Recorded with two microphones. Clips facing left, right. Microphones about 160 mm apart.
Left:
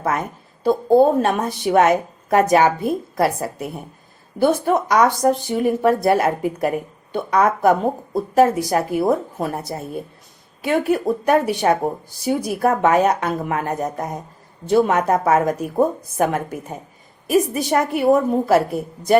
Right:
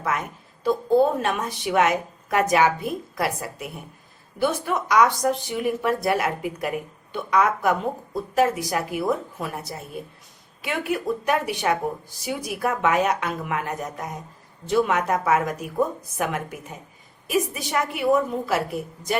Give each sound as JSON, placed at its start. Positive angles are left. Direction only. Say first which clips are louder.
{"t": 0.0, "sound": "a woman's voice", "louder": "left 5 dB", "side_deg": 40}